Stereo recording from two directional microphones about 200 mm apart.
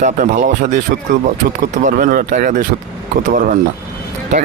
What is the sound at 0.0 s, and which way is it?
Speech, 40° right (ahead or behind).